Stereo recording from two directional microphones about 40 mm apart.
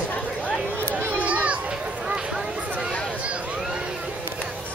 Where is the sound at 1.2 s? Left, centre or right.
Right.